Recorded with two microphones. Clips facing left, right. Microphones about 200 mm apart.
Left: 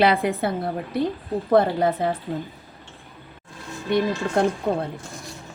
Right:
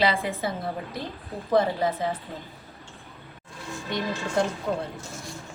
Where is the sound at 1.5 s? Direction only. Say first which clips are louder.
Left 4 dB; 60° left (ahead or behind).